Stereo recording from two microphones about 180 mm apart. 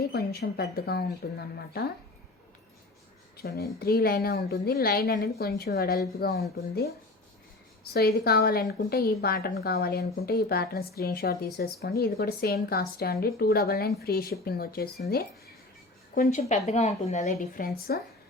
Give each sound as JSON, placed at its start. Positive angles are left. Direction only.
{"t": 0.0, "sound": "a woman's voice", "side_deg": 60}
{"t": 3.3, "sound": "a woman's voice", "side_deg": 60}
{"t": 7.9, "sound": "a woman's voice", "side_deg": 60}
{"t": 16.1, "sound": "a woman's voice", "side_deg": 50}
{"t": 16.4, "sound": "a woman's voice", "side_deg": 40}